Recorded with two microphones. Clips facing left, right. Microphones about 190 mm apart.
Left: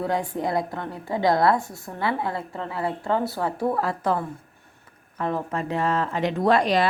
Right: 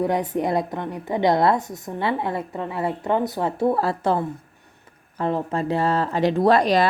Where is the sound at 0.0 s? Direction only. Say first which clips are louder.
Right 3 dB; 20° right (ahead or behind).